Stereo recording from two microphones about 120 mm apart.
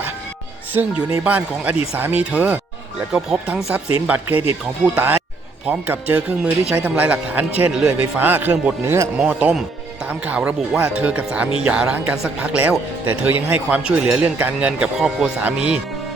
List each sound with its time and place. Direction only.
0.7 s a man's voice: 15° right (ahead or behind)